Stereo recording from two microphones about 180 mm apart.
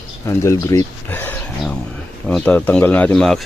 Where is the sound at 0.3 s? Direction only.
15° left (ahead or behind).